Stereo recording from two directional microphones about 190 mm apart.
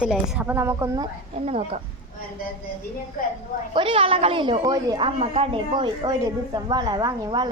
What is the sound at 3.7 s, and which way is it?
A woman's voice, 30° right (ahead or behind).